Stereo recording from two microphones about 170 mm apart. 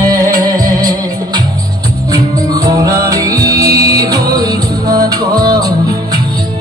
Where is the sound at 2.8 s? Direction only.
20° right (ahead or behind).